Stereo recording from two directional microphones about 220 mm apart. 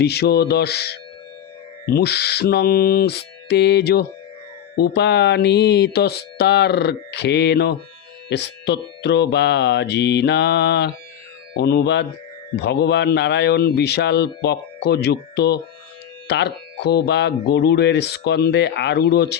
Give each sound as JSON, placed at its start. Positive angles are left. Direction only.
{"t": 0.0, "sound": "speech", "side_deg": 50}